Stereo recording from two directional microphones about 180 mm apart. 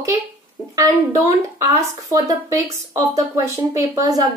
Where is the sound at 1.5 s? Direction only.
20° right (ahead or behind).